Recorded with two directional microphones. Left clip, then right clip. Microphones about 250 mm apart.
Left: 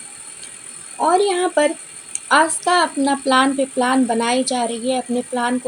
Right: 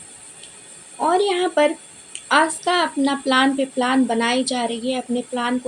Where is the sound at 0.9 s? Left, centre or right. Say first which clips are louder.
Left 2 dB; left.